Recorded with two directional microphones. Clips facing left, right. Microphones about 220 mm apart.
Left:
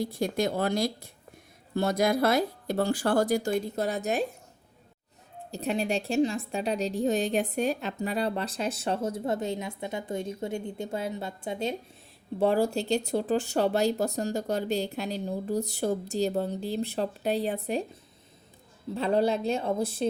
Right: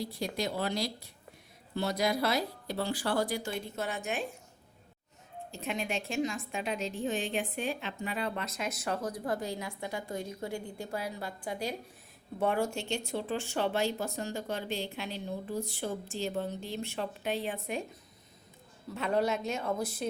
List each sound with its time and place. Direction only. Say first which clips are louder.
0.0 s speech: left 7 dB; 50° left (ahead or behind)
5.5 s a woman's voice: left 7 dB; 35° left (ahead or behind)
18.9 s a woman's voice: left 5 dB; 30° left (ahead or behind)